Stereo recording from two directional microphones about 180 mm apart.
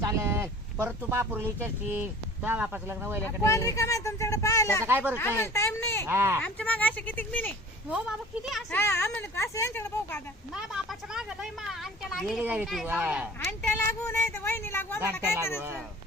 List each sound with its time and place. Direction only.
0.0 s a sound: 15° right (ahead or behind)
1.6 s speech: 10° right (ahead or behind)
3.4 s speech: 15° left (ahead or behind)
4.8 s speech: 10° right (ahead or behind)
5.1 s speech: 15° left (ahead or behind)
6.1 s speech: 15° right (ahead or behind)
6.4 s speech: 10° left (ahead or behind)
7.9 s a woman's voice: 5° right (ahead or behind)
8.7 s speech: 15° left (ahead or behind)
10.5 s a woman's voice: centre (ahead or behind)
13.4 s speech: 10° left (ahead or behind)